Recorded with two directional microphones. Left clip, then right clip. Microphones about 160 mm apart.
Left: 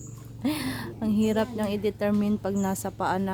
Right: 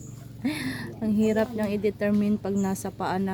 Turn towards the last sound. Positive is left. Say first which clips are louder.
# left 1 dB
turn(degrees=10)  # may be behind; listen again after turning